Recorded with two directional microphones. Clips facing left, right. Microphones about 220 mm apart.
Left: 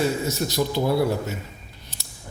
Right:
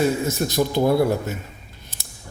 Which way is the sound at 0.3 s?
50° right (ahead or behind).